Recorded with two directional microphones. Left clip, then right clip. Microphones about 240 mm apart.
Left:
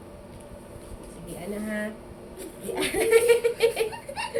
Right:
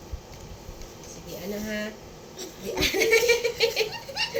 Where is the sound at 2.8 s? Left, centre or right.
Centre.